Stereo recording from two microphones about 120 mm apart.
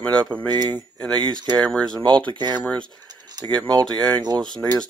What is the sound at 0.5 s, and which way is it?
Speech, 40° right (ahead or behind).